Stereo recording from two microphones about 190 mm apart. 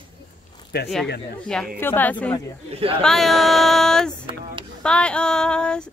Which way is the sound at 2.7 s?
30° right (ahead or behind).